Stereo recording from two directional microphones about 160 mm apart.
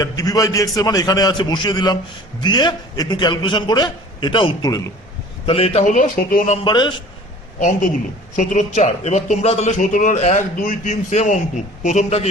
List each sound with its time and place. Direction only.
0.0 s a man's voice: 20° left (ahead or behind)
5.5 s a man's voice: 35° left (ahead or behind); by 6.6 s 55° left (ahead or behind)
6.7 s a man's voice: 30° left (ahead or behind)
8.4 s a man's voice: 50° left (ahead or behind)